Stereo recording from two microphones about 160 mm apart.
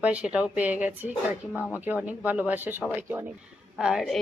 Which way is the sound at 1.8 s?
10° right (ahead or behind).